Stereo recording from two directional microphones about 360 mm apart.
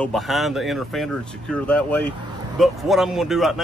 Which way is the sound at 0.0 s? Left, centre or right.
Centre.